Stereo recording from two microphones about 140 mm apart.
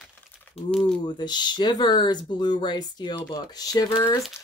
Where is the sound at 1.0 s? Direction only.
30° left (ahead or behind).